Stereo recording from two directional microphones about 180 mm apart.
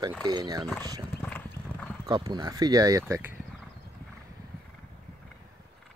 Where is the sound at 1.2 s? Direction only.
10° left (ahead or behind).